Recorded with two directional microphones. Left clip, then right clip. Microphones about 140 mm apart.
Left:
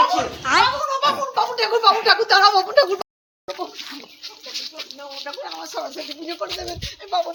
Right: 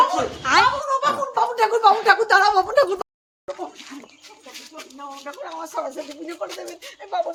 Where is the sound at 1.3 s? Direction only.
25° right (ahead or behind).